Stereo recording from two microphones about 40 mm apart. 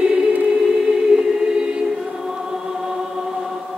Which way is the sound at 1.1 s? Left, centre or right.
Centre.